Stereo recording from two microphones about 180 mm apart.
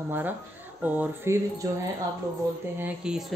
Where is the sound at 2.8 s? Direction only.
5° right (ahead or behind).